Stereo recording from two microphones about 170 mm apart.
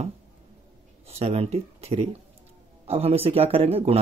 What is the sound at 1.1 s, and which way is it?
Speech, 35° right (ahead or behind).